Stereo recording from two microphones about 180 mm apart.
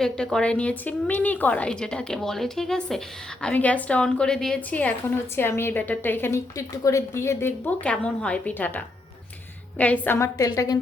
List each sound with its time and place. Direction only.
0.0 s a woman's voice: 5° left (ahead or behind); by 10.8 s 20° left (ahead or behind)